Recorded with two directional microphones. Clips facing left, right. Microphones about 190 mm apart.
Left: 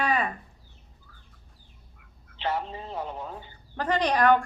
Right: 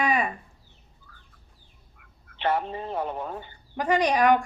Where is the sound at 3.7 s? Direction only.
10° right (ahead or behind).